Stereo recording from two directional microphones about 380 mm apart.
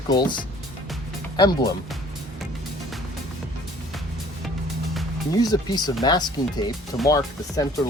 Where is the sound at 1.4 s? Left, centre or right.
Centre.